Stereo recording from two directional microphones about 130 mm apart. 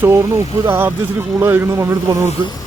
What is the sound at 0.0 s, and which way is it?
Speech, 20° right (ahead or behind).